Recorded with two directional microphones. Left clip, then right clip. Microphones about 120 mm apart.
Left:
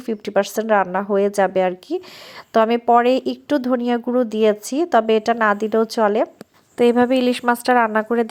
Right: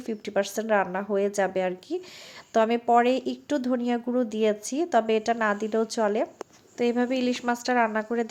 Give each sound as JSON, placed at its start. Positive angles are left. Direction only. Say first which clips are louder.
{"t": 0.0, "sound": "speech", "louder": "left 8 dB", "side_deg": 35}
{"t": 6.7, "sound": "speech", "louder": "left 10 dB", "side_deg": 45}